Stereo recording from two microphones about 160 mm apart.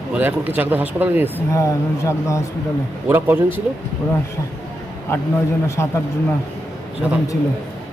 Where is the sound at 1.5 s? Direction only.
20° left (ahead or behind).